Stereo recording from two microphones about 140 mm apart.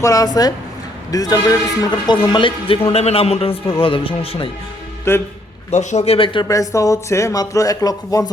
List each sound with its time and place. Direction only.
0.0 s speech: 25° left (ahead or behind); by 4.4 s 40° left (ahead or behind)
5.1 s a man's voice: 20° left (ahead or behind)
5.7 s speech: 55° left (ahead or behind); by 6.5 s 35° left (ahead or behind)
6.5 s speech: 25° left (ahead or behind)